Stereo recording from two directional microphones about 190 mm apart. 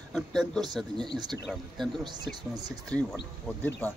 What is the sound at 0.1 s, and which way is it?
Speech, centre (ahead or behind).